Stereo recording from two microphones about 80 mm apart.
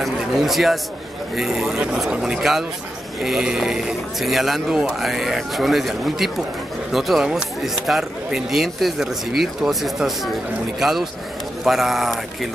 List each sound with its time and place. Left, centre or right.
0.0 s speech: centre